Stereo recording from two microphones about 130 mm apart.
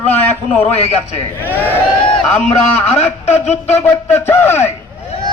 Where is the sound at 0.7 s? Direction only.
55° left (ahead or behind).